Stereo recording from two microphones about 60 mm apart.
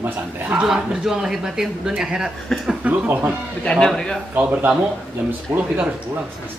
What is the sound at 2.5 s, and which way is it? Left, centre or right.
Speech, centre.